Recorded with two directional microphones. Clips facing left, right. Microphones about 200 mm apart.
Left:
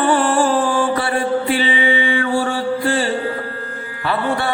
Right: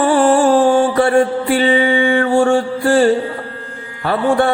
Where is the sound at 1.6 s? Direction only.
45° right (ahead or behind).